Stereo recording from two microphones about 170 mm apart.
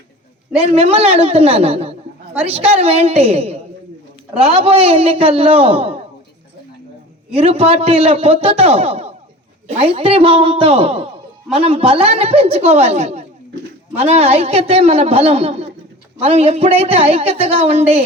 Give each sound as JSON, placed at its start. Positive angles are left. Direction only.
{"t": 0.5, "sound": "a woman's voice", "side_deg": -35}
{"t": 7.3, "sound": "a woman's voice", "side_deg": -35}